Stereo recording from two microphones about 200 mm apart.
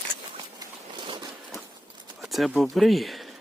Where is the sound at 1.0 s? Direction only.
25° right (ahead or behind).